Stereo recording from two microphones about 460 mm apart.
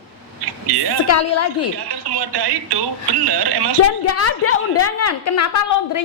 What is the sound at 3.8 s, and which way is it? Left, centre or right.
A woman's voice, left.